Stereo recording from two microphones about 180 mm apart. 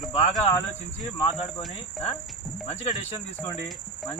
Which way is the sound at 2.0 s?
Centre (ahead or behind).